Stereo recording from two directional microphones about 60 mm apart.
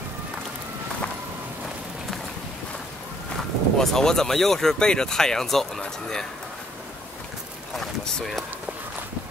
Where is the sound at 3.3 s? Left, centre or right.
Centre.